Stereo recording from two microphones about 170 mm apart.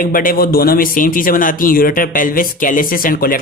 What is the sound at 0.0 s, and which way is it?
A man's voice, 55° left (ahead or behind).